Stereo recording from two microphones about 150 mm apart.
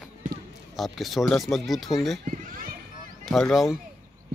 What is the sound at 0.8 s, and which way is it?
Speech, centre (ahead or behind).